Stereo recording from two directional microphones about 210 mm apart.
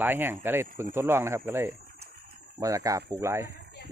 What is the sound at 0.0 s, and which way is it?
Speech, 10° right (ahead or behind).